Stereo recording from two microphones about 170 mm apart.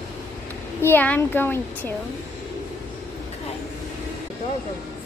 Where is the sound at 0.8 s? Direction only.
10° left (ahead or behind).